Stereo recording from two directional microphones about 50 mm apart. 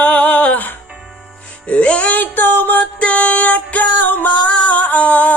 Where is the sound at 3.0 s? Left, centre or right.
Left.